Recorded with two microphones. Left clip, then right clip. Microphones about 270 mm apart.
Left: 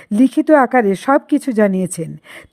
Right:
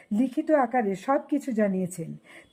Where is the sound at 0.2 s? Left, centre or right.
Left.